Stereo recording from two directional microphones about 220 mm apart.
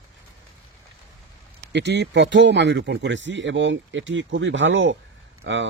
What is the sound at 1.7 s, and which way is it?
Speech, 50° right (ahead or behind).